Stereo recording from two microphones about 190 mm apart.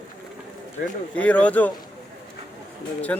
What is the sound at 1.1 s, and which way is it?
Speech, 5° left (ahead or behind).